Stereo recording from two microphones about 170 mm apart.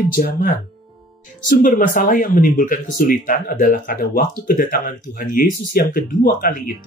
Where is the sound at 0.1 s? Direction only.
55° left (ahead or behind).